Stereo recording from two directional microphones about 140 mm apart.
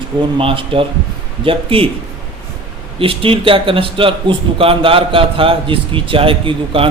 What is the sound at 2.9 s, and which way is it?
A man's voice, 40° right (ahead or behind).